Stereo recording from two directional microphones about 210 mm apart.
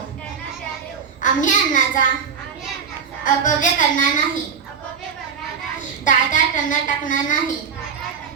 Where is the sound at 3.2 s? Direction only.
40° left (ahead or behind).